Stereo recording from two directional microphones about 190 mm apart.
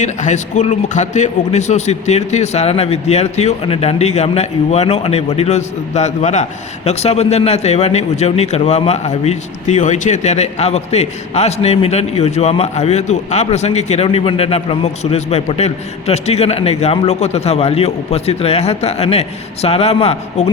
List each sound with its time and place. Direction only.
0.0 s a man's voice: 40° left (ahead or behind)